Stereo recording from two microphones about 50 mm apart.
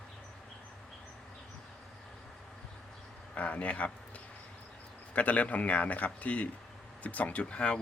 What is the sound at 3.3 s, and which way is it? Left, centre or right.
Speech, left.